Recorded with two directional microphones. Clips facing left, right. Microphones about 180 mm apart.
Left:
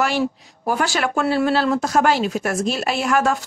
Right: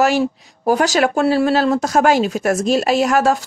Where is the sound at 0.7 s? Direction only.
40° right (ahead or behind).